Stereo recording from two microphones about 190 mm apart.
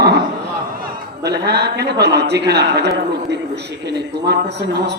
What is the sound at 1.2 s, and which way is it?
Speech, 60° right (ahead or behind).